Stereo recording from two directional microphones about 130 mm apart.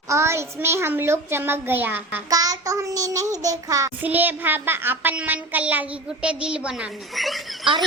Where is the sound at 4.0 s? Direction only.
15° right (ahead or behind).